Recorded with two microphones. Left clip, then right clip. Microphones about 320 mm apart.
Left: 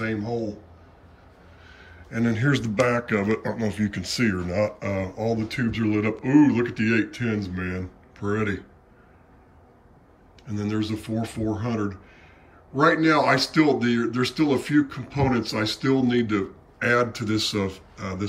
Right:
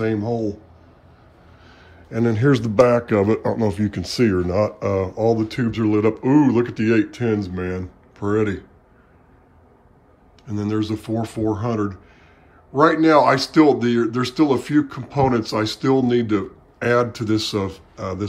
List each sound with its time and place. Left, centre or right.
0.1 s speech: centre
2.1 s speech: centre
10.4 s speech: centre